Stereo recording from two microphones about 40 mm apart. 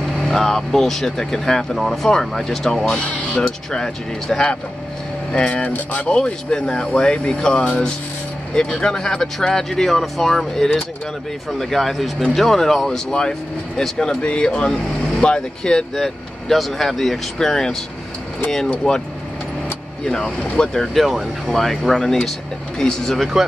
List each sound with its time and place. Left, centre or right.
0.3 s speech: centre
6.0 s speech: left
15.9 s speech: centre
18.8 s speech: left
20.5 s speech: left
20.8 s speech: centre
23.3 s speech: centre